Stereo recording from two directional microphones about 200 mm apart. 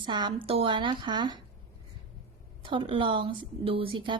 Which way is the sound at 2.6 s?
25° right (ahead or behind).